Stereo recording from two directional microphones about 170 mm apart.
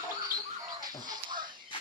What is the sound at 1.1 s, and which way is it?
Fowl, 25° right (ahead or behind).